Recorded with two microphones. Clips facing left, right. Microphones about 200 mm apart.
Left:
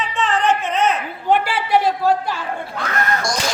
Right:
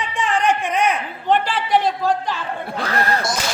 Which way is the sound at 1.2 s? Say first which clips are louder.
Left 1 dB; 10° left (ahead or behind).